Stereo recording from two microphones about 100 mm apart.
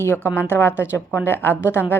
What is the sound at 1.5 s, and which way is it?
Speech, 20° right (ahead or behind).